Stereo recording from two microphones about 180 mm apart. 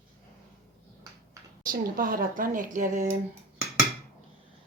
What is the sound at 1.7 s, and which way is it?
Speech, 50° right (ahead or behind).